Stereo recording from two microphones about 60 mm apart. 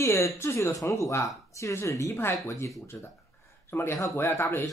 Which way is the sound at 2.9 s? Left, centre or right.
Left.